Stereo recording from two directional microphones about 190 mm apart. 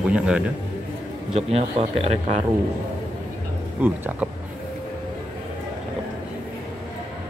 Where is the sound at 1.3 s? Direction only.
35° right (ahead or behind).